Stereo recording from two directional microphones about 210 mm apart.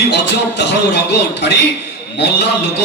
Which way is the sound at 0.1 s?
55° left (ahead or behind).